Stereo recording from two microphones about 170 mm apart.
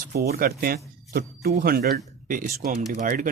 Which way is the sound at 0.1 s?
60° right (ahead or behind).